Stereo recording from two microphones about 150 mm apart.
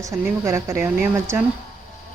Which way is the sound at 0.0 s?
20° right (ahead or behind).